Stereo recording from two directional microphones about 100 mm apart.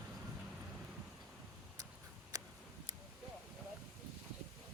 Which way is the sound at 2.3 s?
40° right (ahead or behind).